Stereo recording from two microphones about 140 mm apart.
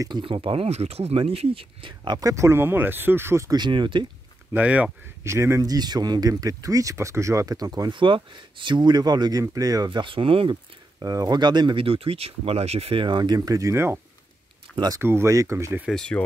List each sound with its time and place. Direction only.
0.0 s speech: 35° right (ahead or behind)
4.6 s speech: 10° right (ahead or behind); by 9.8 s 25° right (ahead or behind)
9.8 s speech: 35° right (ahead or behind)
11.0 s speech: 25° right (ahead or behind)
15.0 s speech: 15° right (ahead or behind)
15.9 s speech: 5° left (ahead or behind)